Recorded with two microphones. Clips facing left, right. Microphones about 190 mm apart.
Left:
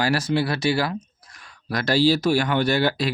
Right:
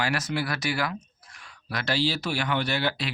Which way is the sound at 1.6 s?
40° left (ahead or behind).